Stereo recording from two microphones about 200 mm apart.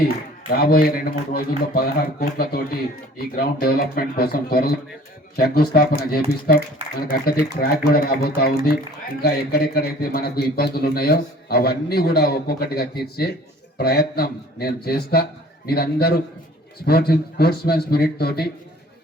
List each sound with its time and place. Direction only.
0.5 s a man's voice: 50° left (ahead or behind)